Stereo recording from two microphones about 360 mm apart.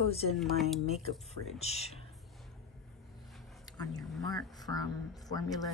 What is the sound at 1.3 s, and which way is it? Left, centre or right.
Speech, centre.